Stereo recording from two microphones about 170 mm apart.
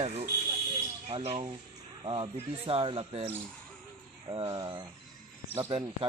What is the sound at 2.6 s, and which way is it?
Speech, 30° right (ahead or behind).